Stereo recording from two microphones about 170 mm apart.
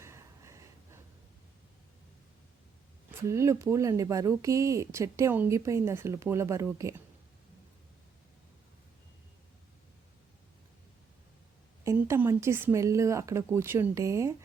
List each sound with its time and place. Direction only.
0.0 s a sound: 15° right (ahead or behind)
3.2 s speech: 15° right (ahead or behind)
11.8 s speech: 15° right (ahead or behind)